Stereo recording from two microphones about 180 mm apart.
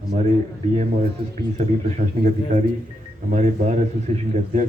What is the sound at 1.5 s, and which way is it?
Speech, 40° right (ahead or behind).